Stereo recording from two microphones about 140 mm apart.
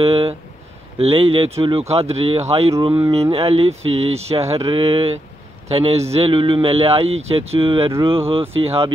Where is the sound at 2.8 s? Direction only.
35° right (ahead or behind).